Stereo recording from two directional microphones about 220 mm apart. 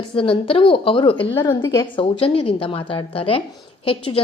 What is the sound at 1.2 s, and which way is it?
A woman's voice, 10° left (ahead or behind).